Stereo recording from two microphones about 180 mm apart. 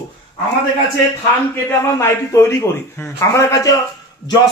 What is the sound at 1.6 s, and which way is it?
A man's voice, 15° left (ahead or behind).